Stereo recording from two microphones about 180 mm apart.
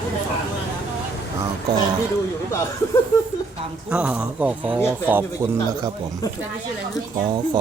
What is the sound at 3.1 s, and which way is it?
Speech, 15° left (ahead or behind).